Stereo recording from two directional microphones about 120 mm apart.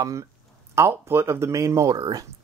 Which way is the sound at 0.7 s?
25° right (ahead or behind).